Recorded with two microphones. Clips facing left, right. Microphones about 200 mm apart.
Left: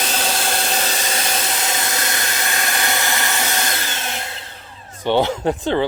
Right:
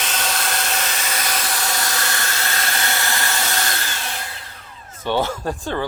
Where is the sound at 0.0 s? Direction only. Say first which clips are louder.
Left 3 dB; 35° left (ahead or behind).